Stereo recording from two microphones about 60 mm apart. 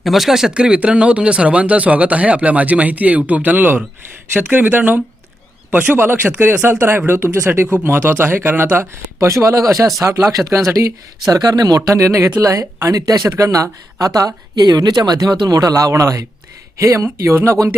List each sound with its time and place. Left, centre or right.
0.0 s speech: centre
0.5 s speech: centre; by 8.9 s right
9.2 s speech: right
11.3 s a man's voice: right
13.4 s speech: right